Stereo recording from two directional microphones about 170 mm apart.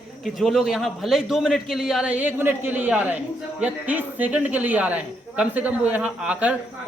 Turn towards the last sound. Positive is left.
turn(degrees=-10)  # may be behind; listen again after turning